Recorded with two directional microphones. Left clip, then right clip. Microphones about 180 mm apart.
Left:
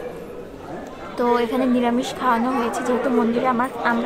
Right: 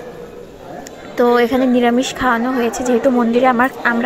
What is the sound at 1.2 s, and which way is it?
A woman's voice, 25° right (ahead or behind).